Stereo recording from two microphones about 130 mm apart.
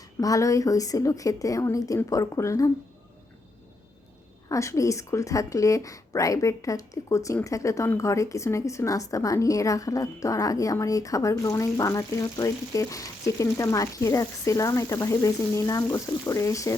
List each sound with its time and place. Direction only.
0.2 s a woman's voice: 25° left (ahead or behind)
4.4 s a woman's voice: 25° left (ahead or behind)